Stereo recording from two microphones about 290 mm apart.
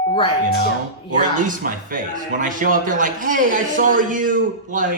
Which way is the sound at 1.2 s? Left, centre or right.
Right.